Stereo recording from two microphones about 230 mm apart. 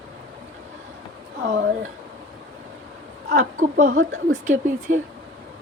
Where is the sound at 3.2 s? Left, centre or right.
Right.